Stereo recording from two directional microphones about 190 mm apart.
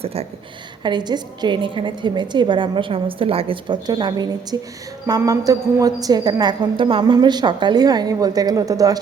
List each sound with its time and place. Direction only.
0.0 s a woman's voice: 30° right (ahead or behind)